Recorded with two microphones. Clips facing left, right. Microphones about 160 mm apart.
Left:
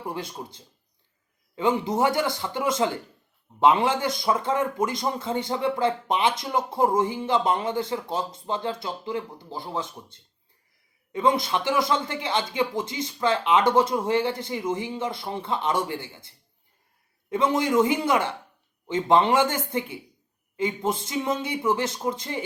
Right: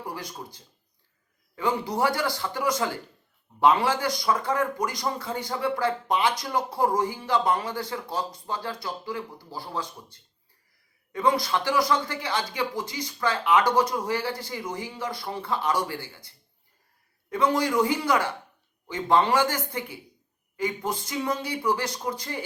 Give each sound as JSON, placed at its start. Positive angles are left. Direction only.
{"t": 0.0, "sound": "a man's voice", "side_deg": 25}